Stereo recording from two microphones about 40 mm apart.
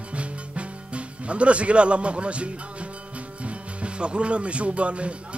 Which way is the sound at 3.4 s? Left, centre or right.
Right.